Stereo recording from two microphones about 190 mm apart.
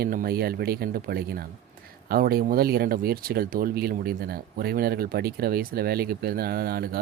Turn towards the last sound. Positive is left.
turn(degrees=-55)  # may be behind; listen again after turning